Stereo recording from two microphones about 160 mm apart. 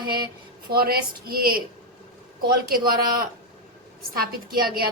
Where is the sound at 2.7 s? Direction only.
65° right (ahead or behind).